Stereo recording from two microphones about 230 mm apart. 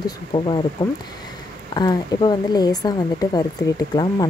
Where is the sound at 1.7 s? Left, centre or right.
Centre.